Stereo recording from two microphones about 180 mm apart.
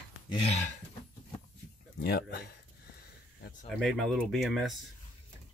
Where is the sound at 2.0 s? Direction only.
65° left (ahead or behind).